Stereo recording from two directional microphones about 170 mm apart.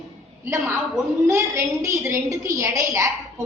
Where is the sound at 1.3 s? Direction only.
15° right (ahead or behind).